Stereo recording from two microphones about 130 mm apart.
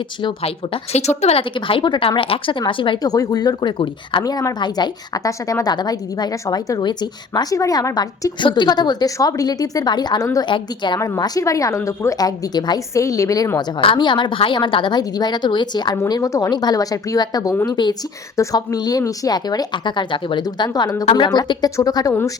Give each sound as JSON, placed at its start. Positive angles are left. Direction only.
{"t": 0.2, "sound": "a woman's voice", "side_deg": 40}